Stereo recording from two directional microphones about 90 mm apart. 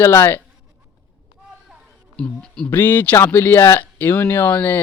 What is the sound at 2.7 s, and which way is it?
Speech, 20° left (ahead or behind).